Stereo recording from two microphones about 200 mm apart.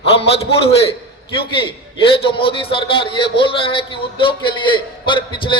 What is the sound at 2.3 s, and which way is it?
A man's voice, 25° left (ahead or behind).